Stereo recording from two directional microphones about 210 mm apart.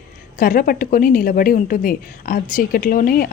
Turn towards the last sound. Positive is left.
turn(degrees=45)  # may be behind; listen again after turning